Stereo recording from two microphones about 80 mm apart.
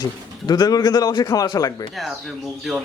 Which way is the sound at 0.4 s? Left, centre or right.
Left.